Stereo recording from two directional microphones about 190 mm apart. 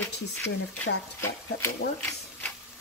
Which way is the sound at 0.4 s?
15° left (ahead or behind).